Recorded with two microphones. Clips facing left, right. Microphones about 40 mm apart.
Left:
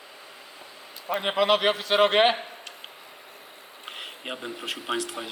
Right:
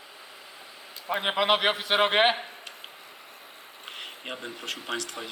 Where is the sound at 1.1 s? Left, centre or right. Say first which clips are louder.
Left 2 dB; centre.